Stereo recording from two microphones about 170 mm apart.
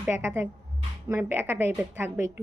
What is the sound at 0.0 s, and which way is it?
Speech, 15° right (ahead or behind).